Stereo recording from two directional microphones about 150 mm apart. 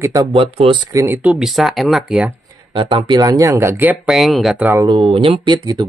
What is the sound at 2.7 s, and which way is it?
Speech, 30° right (ahead or behind).